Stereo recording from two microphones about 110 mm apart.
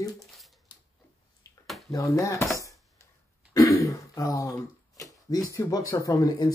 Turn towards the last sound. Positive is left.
turn(degrees=35)  # may be behind; listen again after turning